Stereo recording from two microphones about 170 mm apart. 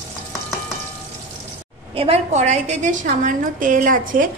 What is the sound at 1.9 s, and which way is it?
A woman's voice, 40° right (ahead or behind).